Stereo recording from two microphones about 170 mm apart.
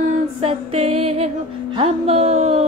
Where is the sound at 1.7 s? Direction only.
35° right (ahead or behind).